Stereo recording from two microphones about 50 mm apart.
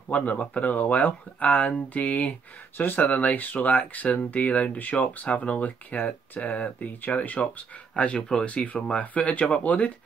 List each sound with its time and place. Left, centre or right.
0.1 s speech: left